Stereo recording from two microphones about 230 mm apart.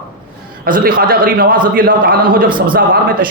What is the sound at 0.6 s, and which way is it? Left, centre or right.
A man's voice, right.